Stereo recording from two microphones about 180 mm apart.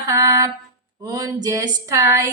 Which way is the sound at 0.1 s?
20° right (ahead or behind).